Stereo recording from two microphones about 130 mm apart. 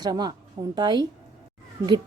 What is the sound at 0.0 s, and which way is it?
A woman's voice, 30° right (ahead or behind).